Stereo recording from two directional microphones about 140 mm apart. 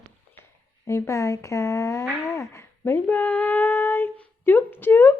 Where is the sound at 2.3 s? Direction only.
20° left (ahead or behind).